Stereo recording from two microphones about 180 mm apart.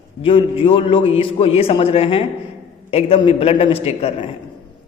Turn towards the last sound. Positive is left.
turn(degrees=35)  # may be behind; listen again after turning